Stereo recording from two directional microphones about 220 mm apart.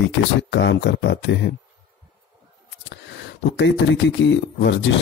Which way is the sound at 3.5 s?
55° left (ahead or behind).